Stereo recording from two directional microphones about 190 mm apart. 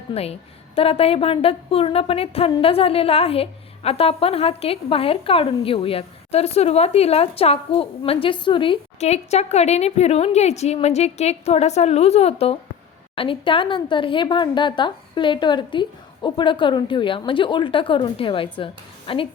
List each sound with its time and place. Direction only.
0.1 s a woman's voice: 35° left (ahead or behind)